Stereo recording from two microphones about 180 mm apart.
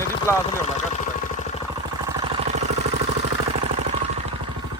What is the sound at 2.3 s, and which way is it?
Vehicle, 40° right (ahead or behind).